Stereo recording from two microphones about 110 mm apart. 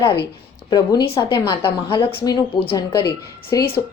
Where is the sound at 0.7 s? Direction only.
40° left (ahead or behind); by 2.2 s 55° left (ahead or behind).